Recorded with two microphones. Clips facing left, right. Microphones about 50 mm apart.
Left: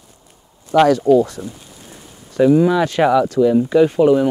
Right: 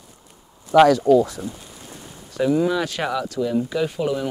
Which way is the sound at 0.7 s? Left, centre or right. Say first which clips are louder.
Left 1 dB; centre.